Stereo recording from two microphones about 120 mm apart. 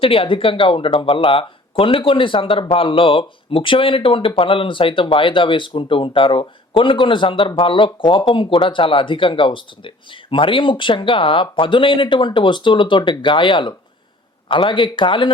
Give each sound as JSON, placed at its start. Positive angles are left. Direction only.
{"t": 0.0, "sound": "speech", "side_deg": 50}